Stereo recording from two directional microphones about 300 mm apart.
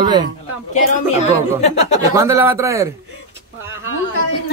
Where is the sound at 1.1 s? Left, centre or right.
Left.